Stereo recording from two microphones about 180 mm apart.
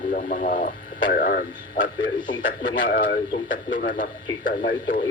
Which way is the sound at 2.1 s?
25° left (ahead or behind).